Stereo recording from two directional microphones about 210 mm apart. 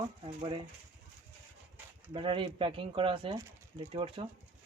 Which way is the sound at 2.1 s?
25° right (ahead or behind).